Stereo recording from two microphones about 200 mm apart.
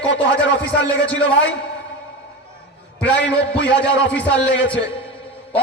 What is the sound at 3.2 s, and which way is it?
Speech, 60° left (ahead or behind).